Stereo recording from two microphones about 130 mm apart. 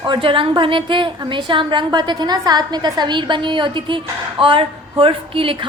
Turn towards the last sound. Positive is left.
turn(degrees=-45)  # may be behind; listen again after turning